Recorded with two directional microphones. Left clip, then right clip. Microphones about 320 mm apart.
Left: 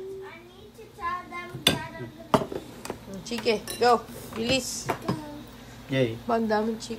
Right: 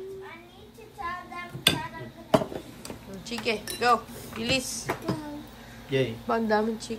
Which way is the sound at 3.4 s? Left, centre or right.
Centre.